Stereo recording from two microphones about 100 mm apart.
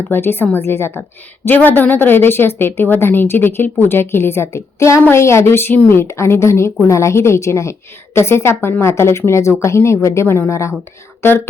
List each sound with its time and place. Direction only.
0.1 s a woman's voice: 20° left (ahead or behind)